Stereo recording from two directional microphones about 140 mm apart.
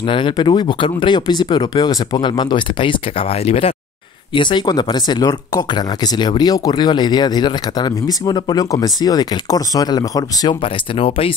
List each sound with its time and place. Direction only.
0.1 s speech: 35° left (ahead or behind)
10.6 s speech: 40° left (ahead or behind)